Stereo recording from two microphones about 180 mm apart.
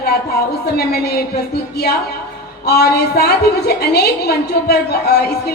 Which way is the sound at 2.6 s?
60° left (ahead or behind).